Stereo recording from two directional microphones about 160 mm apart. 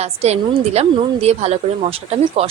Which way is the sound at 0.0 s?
40° right (ahead or behind).